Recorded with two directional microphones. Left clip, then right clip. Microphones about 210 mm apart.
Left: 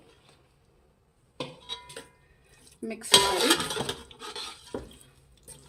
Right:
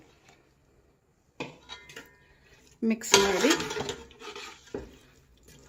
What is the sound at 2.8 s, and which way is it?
Speech, 45° right (ahead or behind).